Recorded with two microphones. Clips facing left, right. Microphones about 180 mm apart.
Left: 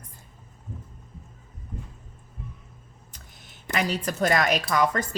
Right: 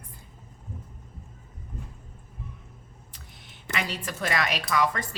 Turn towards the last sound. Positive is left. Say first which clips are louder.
# left 3 dB
turn(degrees=40)  # may be behind; listen again after turning